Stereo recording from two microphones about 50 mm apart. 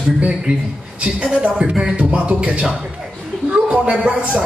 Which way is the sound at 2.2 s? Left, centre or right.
Right.